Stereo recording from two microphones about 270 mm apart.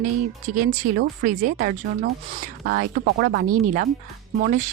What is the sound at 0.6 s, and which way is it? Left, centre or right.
Speech, right.